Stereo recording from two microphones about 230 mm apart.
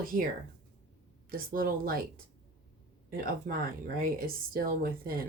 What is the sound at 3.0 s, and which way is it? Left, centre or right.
Speech, right.